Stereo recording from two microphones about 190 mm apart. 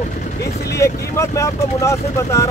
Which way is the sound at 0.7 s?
15° left (ahead or behind).